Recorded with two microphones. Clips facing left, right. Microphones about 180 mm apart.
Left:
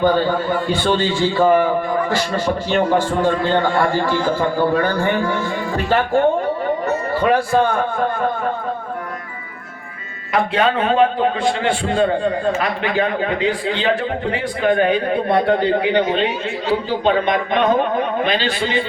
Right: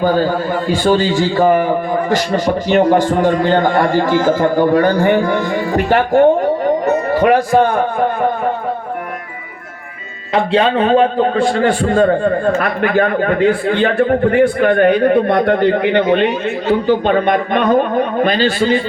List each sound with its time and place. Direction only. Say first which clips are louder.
0.9 s a man's voice: right 3 dB; 40° right (ahead or behind)
2.0 s a man's voice: right 4 dB; 15° right (ahead or behind)
10.3 s a man's voice: right 4 dB; 30° right (ahead or behind)
11.3 s a man's voice: right 5 dB; 45° right (ahead or behind)